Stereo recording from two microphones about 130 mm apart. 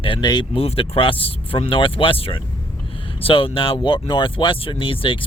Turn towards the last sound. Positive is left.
turn(degrees=45)  # may be behind; listen again after turning